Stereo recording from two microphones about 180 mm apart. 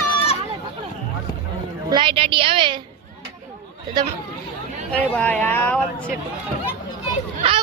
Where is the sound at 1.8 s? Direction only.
25° right (ahead or behind).